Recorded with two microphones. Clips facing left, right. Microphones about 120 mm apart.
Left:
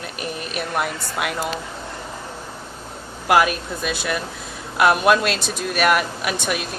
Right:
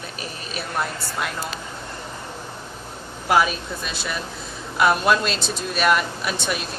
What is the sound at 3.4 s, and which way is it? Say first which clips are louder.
Speech: left 4 dB; 60° left (ahead or behind).